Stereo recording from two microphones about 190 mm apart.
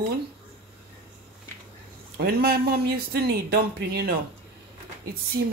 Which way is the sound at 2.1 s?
55° right (ahead or behind).